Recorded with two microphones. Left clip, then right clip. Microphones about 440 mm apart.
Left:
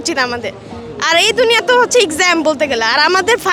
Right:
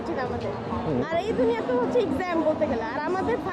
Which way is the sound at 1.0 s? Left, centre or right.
Left.